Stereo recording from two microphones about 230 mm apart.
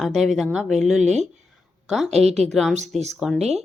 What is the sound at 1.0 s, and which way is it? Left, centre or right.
Speech, right.